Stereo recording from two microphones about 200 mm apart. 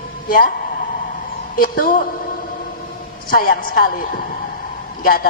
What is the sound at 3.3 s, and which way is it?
A woman's voice, 45° left (ahead or behind).